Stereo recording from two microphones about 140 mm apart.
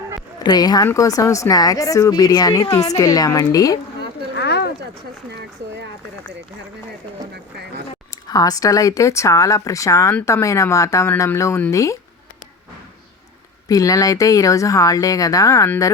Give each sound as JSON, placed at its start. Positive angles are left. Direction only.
{"t": 0.3, "sound": "speech", "side_deg": 30}
{"t": 8.3, "sound": "speech", "side_deg": 25}
{"t": 13.7, "sound": "speech", "side_deg": 25}